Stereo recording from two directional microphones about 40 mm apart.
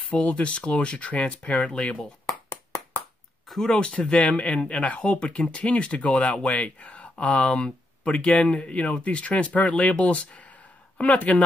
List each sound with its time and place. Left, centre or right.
0.1 s speech: left
3.6 s speech: left